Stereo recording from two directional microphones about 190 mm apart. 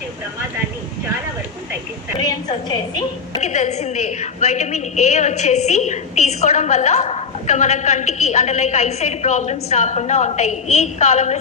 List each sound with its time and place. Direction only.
2.1 s a woman's voice: 20° left (ahead or behind)
3.4 s a woman's voice: 35° left (ahead or behind)